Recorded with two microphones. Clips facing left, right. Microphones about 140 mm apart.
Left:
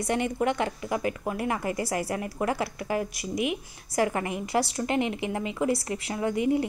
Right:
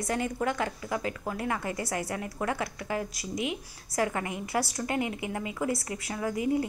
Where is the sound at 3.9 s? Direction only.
25° left (ahead or behind).